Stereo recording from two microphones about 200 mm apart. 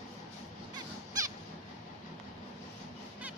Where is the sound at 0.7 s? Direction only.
20° right (ahead or behind).